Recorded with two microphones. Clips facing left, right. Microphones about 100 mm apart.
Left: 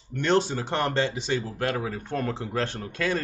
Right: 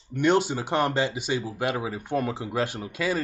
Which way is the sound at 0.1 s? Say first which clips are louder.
Right 1 dB; 15° right (ahead or behind).